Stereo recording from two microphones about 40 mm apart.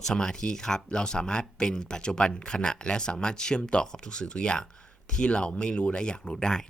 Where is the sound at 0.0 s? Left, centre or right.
Centre.